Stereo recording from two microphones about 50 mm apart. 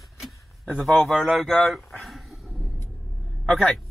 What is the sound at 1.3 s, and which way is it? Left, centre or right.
Speech, centre.